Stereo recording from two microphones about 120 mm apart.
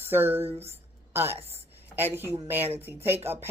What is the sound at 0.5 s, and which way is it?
Speech, 60° right (ahead or behind).